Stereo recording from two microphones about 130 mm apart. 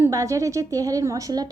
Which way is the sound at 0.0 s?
25° right (ahead or behind).